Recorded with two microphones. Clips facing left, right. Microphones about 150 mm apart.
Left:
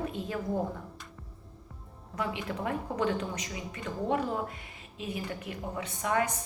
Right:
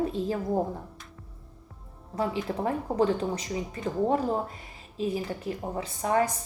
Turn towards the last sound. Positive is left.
turn(degrees=-35)  # may be behind; listen again after turning